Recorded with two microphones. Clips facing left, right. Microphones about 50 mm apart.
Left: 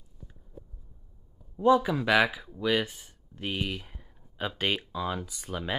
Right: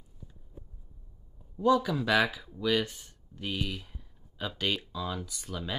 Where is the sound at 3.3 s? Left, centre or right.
Left.